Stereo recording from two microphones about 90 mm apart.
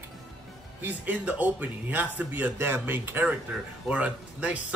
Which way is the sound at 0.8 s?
15° right (ahead or behind).